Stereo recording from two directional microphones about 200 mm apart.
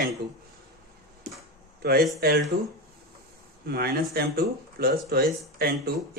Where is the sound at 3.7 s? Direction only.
50° right (ahead or behind).